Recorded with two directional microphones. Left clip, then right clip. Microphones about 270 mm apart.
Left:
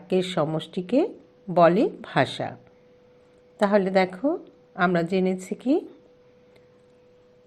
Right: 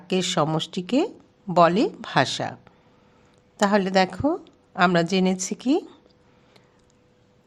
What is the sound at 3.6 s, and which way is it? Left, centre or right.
Speech, right.